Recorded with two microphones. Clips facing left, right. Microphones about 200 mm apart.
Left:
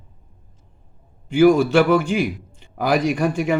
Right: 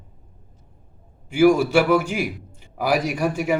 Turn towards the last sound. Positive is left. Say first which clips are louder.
# left 3 dB
turn(degrees=-5)  # may be behind; listen again after turning